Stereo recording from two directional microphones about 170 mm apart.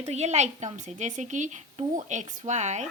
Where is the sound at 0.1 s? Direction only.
40° right (ahead or behind).